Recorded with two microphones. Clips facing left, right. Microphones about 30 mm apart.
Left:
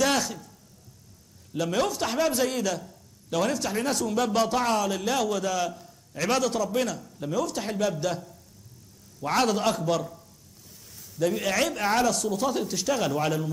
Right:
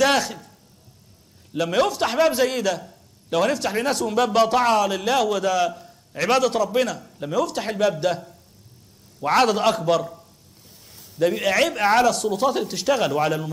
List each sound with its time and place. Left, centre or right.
0.0 s a man's voice: centre
1.5 s a man's voice: right
5.7 s a man's voice: right
7.7 s speech: right
11.3 s speech: centre